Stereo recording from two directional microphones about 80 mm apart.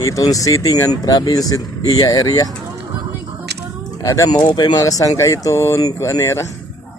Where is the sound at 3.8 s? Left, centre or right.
Left.